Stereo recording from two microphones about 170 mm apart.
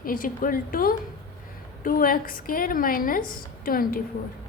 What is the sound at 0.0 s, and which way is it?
A woman's voice, 55° left (ahead or behind).